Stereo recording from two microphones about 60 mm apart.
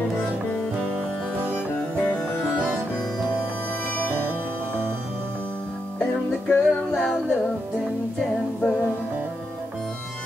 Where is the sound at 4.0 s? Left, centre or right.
Right.